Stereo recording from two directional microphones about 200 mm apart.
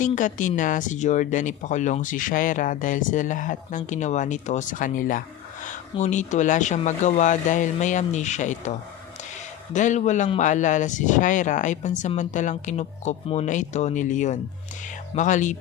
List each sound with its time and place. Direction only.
0.0 s speech: 40° left (ahead or behind)
9.7 s speech: 35° left (ahead or behind)